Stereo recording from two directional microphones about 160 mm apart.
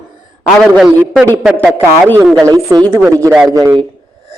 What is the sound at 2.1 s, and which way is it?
Speech, 20° right (ahead or behind).